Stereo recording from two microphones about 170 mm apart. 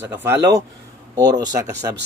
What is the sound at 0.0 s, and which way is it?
Speech, 15° right (ahead or behind).